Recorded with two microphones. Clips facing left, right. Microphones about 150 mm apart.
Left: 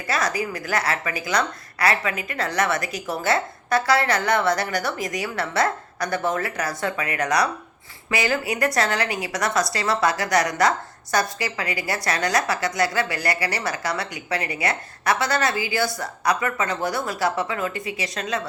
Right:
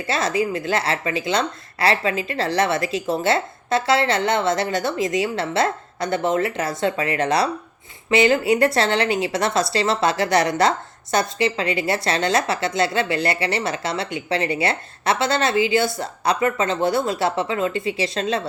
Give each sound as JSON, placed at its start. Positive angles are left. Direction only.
{"t": 0.1, "sound": "a woman's voice", "side_deg": -25}